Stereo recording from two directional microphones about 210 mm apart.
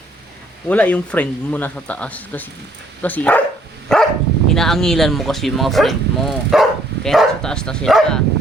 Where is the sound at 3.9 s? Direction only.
5° left (ahead or behind).